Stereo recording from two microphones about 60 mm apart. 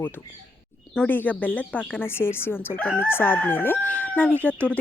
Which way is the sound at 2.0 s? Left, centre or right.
Left.